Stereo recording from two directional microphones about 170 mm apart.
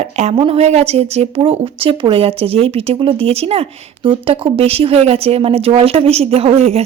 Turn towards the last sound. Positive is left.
turn(degrees=-40)  # may be behind; listen again after turning